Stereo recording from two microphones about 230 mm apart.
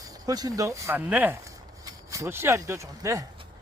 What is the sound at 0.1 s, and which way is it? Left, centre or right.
Speech, centre.